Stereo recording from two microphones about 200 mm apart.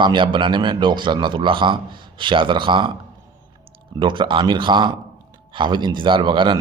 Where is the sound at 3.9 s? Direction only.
25° right (ahead or behind).